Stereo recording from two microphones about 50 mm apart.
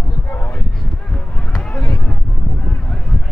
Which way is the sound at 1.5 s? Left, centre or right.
Centre.